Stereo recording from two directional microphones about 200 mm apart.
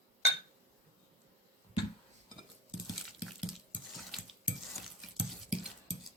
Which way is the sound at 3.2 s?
5° right (ahead or behind).